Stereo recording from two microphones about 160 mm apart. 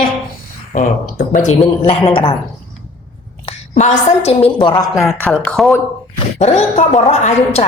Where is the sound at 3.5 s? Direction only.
40° left (ahead or behind).